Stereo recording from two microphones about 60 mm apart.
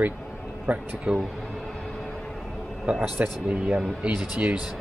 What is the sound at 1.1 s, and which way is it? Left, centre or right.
Speech, centre.